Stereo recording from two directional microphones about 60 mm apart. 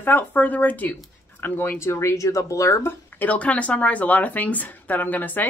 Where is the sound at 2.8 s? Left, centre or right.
Left.